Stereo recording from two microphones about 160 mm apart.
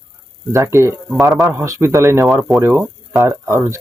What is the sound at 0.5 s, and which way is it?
Speech, 20° right (ahead or behind).